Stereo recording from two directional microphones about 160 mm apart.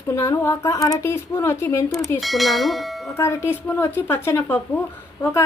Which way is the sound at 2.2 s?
Centre (ahead or behind).